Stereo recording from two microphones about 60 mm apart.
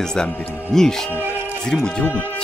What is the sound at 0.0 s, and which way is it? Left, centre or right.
Speech, centre.